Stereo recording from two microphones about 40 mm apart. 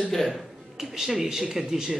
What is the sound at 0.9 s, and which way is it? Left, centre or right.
Speech, centre.